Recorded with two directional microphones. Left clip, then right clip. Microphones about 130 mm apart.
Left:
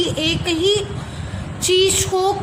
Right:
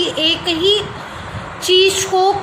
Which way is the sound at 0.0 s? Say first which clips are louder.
Right 4 dB; 25° left (ahead or behind).